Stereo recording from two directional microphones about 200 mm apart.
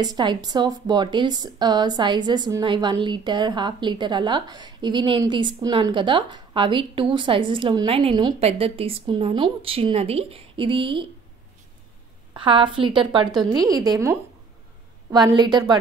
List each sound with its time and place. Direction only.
0.0 s speech: 20° right (ahead or behind)
12.4 s speech: 25° right (ahead or behind)
15.3 s speech: 20° right (ahead or behind)